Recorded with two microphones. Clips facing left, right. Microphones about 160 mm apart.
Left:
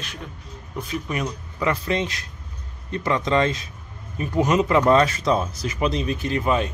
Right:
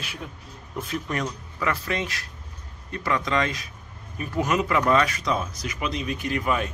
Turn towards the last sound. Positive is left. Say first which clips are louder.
# left 3 dB
turn(degrees=25)  # may be behind; listen again after turning